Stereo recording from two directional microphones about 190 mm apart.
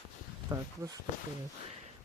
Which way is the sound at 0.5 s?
20° right (ahead or behind).